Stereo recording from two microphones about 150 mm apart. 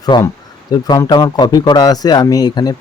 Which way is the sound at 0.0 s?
25° left (ahead or behind).